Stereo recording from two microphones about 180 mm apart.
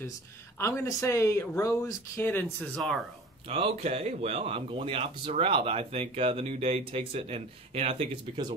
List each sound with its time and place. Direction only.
0.6 s speech: 15° left (ahead or behind)
3.4 s speech: 35° right (ahead or behind)